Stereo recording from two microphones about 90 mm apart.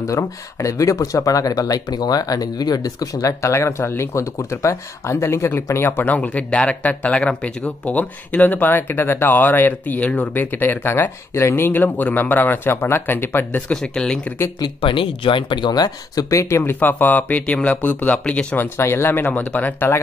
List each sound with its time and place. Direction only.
0.0 s speech: 35° left (ahead or behind); by 14.3 s 10° left (ahead or behind)
14.8 s speech: 75° left (ahead or behind); by 18.7 s 15° left (ahead or behind)
18.8 s speech: 25° left (ahead or behind)